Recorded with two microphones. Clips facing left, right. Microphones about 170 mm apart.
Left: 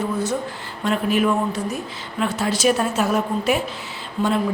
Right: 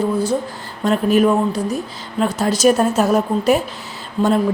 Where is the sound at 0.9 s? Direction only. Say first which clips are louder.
Right 5 dB; 40° right (ahead or behind).